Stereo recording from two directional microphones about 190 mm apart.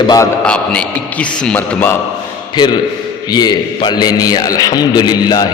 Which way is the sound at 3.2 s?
20° left (ahead or behind).